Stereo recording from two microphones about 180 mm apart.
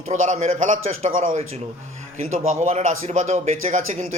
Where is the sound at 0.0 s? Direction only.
45° right (ahead or behind).